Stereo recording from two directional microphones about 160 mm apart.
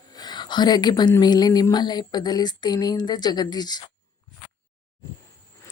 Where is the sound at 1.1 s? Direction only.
25° left (ahead or behind).